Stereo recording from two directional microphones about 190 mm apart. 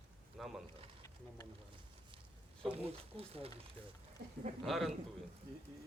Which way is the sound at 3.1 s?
30° right (ahead or behind).